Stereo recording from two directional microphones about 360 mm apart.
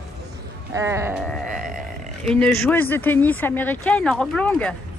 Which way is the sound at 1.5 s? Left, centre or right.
Right.